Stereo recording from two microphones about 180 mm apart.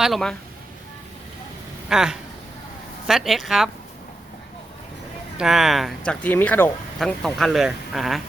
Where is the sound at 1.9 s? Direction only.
5° right (ahead or behind).